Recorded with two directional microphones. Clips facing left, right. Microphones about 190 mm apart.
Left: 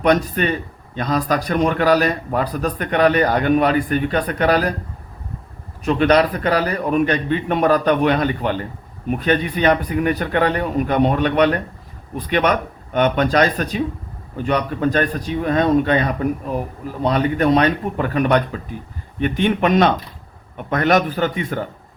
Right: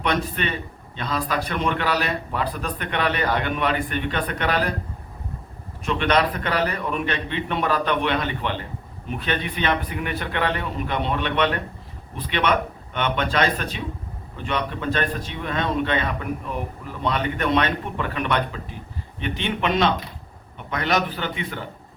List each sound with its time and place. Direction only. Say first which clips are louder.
0.0 s a man's voice: left 8 dB; 40° left (ahead or behind)
5.8 s a man's voice: left 6 dB; 40° left (ahead or behind)